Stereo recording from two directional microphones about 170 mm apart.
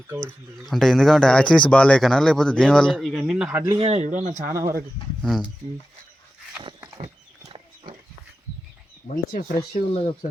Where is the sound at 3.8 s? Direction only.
40° right (ahead or behind).